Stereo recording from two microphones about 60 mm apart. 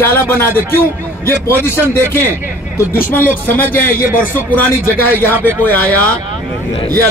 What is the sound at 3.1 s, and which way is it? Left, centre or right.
Speech, left.